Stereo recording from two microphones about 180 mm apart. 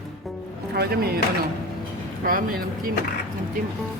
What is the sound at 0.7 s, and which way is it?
Speech, 60° right (ahead or behind).